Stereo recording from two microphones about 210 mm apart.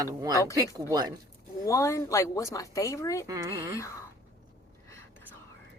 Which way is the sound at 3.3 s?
15° right (ahead or behind).